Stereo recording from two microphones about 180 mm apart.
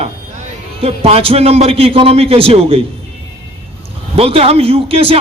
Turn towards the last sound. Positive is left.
turn(degrees=-30)  # may be behind; listen again after turning